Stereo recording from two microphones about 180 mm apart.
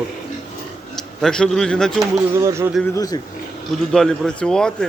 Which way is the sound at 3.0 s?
20° left (ahead or behind).